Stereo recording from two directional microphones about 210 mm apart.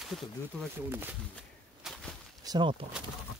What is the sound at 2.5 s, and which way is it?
Speech, 25° right (ahead or behind).